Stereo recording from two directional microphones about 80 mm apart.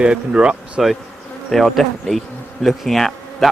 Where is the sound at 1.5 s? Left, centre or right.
Centre.